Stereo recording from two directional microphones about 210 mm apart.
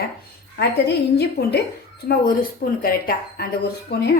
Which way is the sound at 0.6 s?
50° left (ahead or behind).